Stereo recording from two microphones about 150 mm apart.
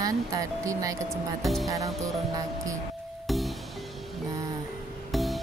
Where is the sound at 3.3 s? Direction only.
Centre (ahead or behind).